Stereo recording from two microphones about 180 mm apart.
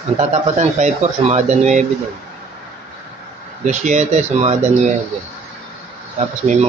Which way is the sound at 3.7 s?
40° right (ahead or behind).